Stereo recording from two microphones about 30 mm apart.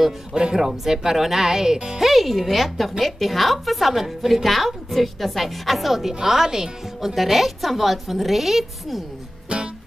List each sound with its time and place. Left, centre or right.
0.6 s speech: centre
2.0 s a woman's voice: centre
6.1 s a woman's voice: centre
7.2 s a woman's voice: centre
9.5 s music: right